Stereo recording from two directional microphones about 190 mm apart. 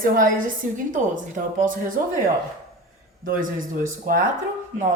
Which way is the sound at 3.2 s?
45° right (ahead or behind).